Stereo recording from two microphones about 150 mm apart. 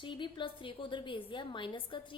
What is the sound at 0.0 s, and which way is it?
A woman's voice, 30° left (ahead or behind).